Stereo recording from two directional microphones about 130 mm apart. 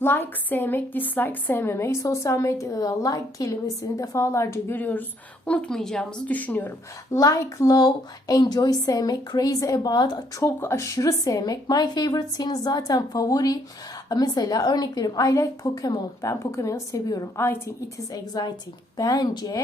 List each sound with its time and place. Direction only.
0.0 s a woman's voice: 15° left (ahead or behind); by 10.2 s 35° left (ahead or behind)
10.4 s a woman's voice: 20° left (ahead or behind)
18.1 s a woman's voice: 30° left (ahead or behind)